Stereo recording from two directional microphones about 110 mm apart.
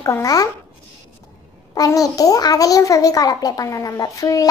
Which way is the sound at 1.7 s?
35° left (ahead or behind).